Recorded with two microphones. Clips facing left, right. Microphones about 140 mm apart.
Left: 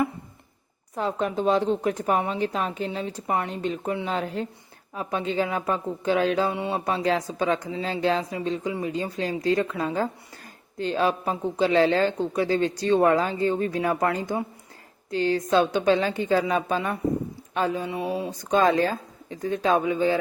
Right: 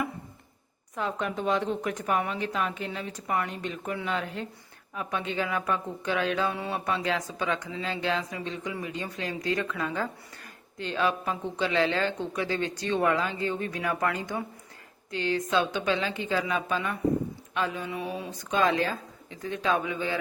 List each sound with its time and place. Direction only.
0.9 s a woman's voice: 35° left (ahead or behind)